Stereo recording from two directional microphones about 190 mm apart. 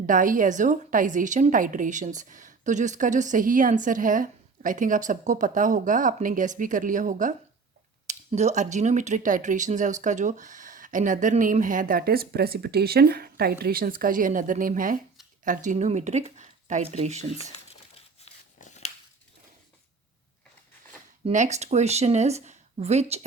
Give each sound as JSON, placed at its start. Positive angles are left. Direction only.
{"t": 0.0, "sound": "a woman's voice", "side_deg": -45}
{"t": 17.7, "sound": "crumpling", "side_deg": 35}
{"t": 21.2, "sound": "speech", "side_deg": -40}